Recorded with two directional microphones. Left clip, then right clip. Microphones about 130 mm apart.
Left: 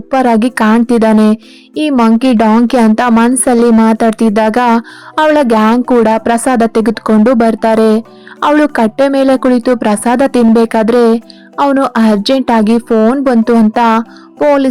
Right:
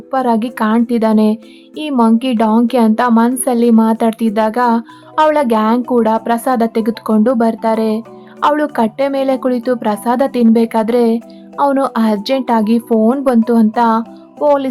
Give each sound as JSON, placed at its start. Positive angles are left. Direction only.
{"t": 0.1, "sound": "a woman's voice", "side_deg": 40}
{"t": 14.4, "sound": "music", "side_deg": 25}